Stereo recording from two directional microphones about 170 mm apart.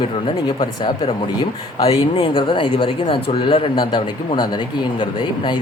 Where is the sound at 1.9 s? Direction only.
35° left (ahead or behind).